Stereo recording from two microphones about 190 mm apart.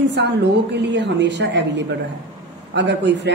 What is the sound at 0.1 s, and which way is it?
A man's voice, 65° right (ahead or behind).